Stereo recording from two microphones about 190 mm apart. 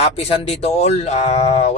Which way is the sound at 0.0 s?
30° left (ahead or behind).